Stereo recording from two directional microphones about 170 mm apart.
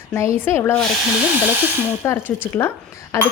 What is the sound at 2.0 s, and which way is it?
Speech, 15° left (ahead or behind).